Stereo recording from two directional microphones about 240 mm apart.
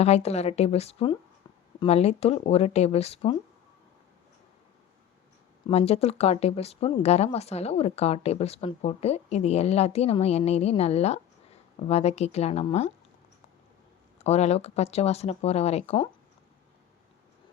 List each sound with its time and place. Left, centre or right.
0.0 s speech: left
5.6 s speech: left
14.2 s speech: left